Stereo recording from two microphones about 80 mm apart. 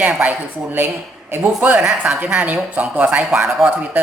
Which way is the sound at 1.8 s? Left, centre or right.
Centre.